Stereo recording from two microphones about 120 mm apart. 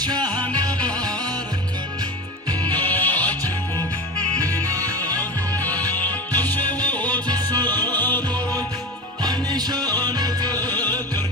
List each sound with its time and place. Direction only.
0.0 s music: 35° right (ahead or behind)
2.8 s music: 15° left (ahead or behind)
4.4 s music: 30° right (ahead or behind)
5.7 s music: 15° left (ahead or behind)
9.2 s music: 35° right (ahead or behind)
10.7 s music: 15° left (ahead or behind)